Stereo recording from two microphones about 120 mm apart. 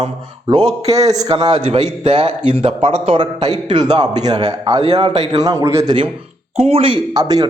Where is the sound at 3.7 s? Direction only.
40° right (ahead or behind).